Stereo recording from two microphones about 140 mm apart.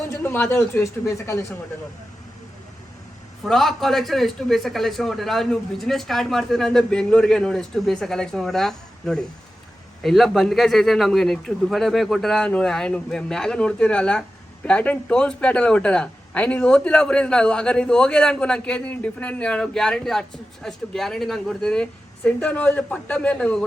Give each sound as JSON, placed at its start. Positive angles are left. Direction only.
{"t": 0.1, "sound": "a man's voice", "side_deg": 15}
{"t": 3.4, "sound": "a man's voice", "side_deg": 0}